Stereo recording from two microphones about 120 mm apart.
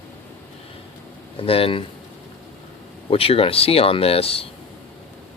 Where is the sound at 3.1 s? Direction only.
50° left (ahead or behind).